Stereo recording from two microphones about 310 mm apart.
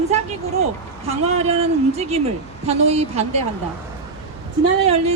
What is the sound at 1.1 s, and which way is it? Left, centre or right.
Speech, right.